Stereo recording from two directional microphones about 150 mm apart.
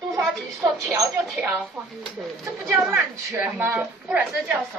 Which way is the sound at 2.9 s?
15° right (ahead or behind).